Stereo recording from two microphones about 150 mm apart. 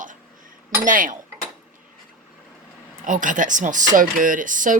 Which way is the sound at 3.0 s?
60° right (ahead or behind).